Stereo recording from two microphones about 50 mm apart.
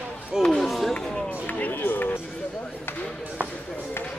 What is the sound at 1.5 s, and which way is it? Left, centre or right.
Run, left.